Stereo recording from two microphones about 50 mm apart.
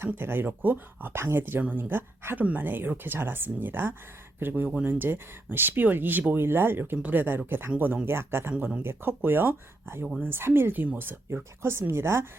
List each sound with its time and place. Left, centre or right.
0.0 s speech: right
2.4 s speech: right
6.3 s speech: right
8.0 s speech: right
11.6 s speech: right